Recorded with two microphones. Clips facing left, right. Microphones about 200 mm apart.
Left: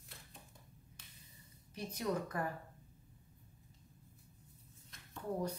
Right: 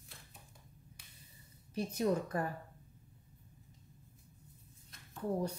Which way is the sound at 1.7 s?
30° right (ahead or behind).